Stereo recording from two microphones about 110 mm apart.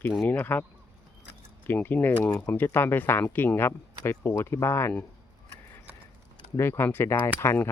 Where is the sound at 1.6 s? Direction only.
15° left (ahead or behind).